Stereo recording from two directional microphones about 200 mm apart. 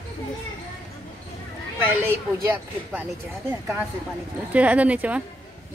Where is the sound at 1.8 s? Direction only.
10° right (ahead or behind).